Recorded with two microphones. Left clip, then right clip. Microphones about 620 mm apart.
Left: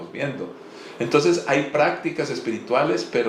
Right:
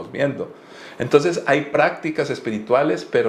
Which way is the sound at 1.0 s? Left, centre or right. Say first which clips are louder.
Right 2 dB; right.